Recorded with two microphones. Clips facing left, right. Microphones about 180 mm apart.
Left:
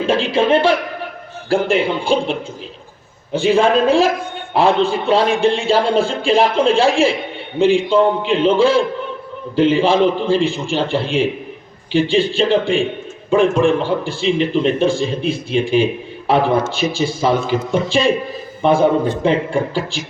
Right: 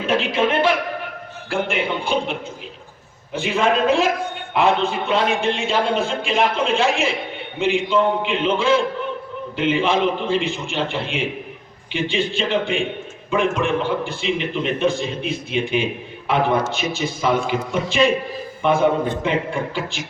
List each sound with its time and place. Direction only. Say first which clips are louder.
0.0 s a man's voice: left 4 dB; 30° left (ahead or behind)
3.3 s a man's voice: left 6 dB; 30° left (ahead or behind)